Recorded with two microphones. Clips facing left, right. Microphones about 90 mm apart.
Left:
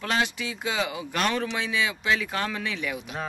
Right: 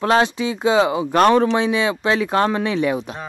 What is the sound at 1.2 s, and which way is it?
Speech, 40° right (ahead or behind).